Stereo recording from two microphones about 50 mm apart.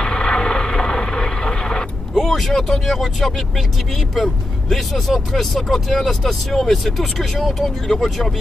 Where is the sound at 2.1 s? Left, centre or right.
Centre.